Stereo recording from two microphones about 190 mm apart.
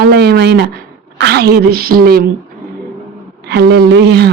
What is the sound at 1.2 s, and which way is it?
A man's voice, 60° right (ahead or behind).